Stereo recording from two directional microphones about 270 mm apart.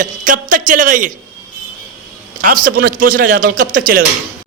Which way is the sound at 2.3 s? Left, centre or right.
Right.